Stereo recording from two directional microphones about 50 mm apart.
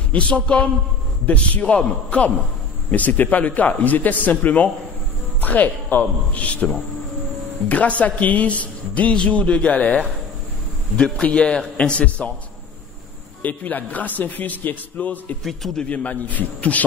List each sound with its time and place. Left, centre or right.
0.1 s a man's voice: left
13.4 s a man's voice: left
15.4 s a man's voice: centre
15.8 s speech: left